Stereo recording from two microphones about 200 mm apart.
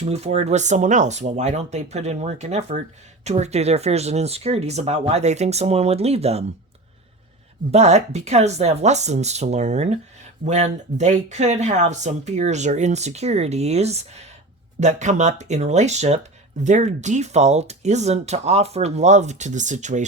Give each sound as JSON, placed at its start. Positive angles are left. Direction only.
{"t": 0.0, "sound": "speech", "side_deg": -35}
{"t": 7.7, "sound": "speech", "side_deg": -35}